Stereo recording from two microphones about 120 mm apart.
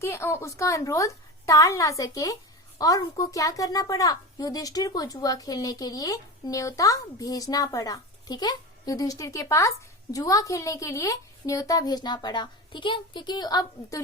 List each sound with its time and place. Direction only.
0.0 s a woman's voice: 20° left (ahead or behind)